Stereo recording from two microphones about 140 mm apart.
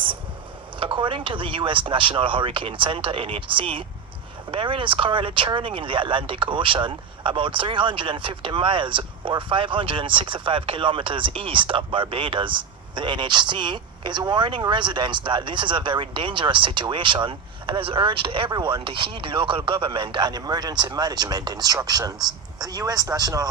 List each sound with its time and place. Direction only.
0.8 s speech: 35° right (ahead or behind)